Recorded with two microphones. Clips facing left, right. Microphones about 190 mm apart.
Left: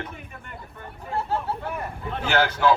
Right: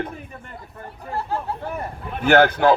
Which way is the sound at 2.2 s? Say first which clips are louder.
Right 6 dB; 55° right (ahead or behind).